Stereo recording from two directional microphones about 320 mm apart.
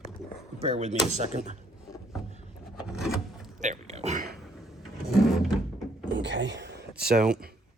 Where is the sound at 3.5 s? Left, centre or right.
Right.